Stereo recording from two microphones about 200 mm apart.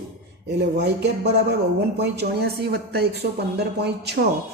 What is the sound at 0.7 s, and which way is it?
Speech, 55° right (ahead or behind).